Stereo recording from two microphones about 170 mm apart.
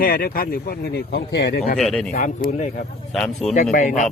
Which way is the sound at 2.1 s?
45° left (ahead or behind).